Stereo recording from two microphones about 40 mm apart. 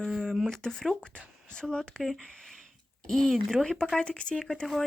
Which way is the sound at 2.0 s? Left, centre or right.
Centre.